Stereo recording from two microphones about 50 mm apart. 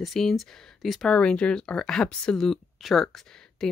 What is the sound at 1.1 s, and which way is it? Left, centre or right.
Speech, centre.